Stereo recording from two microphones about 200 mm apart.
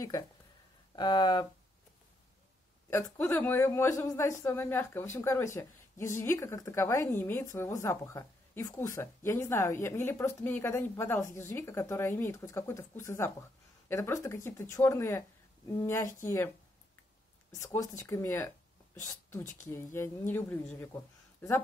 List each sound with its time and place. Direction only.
0.9 s speech: 20° left (ahead or behind)
2.9 s speech: 15° left (ahead or behind)
17.5 s speech: 15° left (ahead or behind)